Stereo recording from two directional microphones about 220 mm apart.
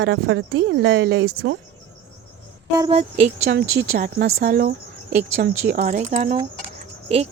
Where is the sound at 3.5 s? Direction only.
50° right (ahead or behind).